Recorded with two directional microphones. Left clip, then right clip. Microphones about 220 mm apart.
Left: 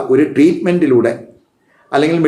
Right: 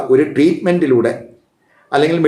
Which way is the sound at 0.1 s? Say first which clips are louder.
Left 1 dB; 5° right (ahead or behind).